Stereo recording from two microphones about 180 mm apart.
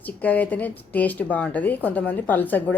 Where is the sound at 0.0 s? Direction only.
10° left (ahead or behind).